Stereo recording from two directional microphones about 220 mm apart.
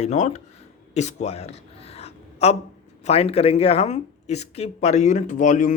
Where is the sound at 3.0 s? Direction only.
30° left (ahead or behind).